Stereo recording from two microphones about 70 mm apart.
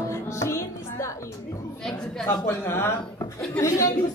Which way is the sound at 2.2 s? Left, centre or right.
Left.